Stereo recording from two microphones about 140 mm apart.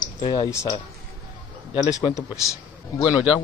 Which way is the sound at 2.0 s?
25° left (ahead or behind).